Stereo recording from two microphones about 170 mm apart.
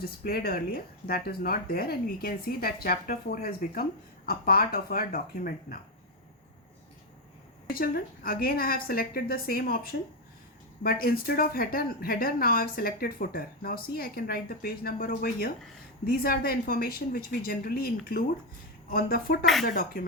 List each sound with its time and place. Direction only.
0.0 s speech: 60° left (ahead or behind)
7.7 s speech: 60° left (ahead or behind)